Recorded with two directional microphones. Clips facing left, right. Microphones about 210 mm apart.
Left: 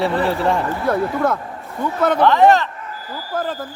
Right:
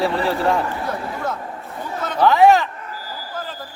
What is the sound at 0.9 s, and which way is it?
Speech, 55° left (ahead or behind).